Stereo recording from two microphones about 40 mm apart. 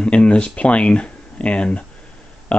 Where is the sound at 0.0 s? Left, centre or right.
Left.